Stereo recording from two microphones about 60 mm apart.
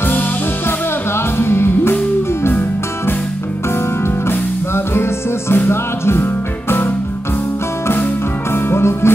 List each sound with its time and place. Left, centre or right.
0.7 s music: left
4.0 s music: left
8.5 s music: left